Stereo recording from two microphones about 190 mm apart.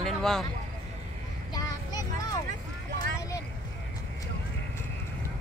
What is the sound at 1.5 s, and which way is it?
Vehicle, 20° left (ahead or behind).